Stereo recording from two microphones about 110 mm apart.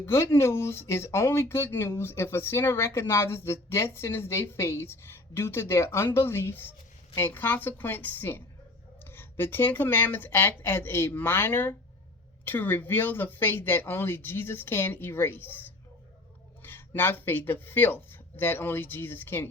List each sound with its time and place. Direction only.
0.0 s a woman's voice: 25° left (ahead or behind)